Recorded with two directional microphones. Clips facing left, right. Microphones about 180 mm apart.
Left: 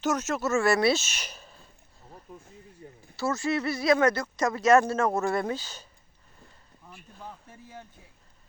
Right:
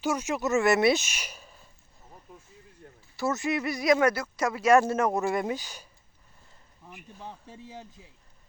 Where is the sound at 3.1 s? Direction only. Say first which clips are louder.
Even; 20° right (ahead or behind).